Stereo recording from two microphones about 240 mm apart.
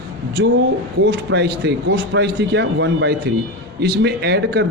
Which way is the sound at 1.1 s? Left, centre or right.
Right.